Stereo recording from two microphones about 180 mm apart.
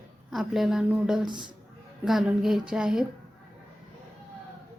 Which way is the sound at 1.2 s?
25° right (ahead or behind).